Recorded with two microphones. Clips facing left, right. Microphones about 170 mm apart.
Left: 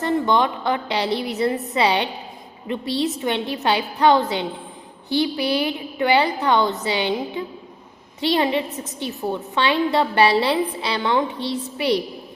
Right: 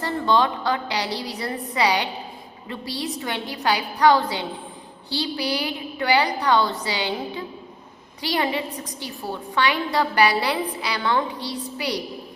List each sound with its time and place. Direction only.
0.0 s a woman's voice: 20° left (ahead or behind)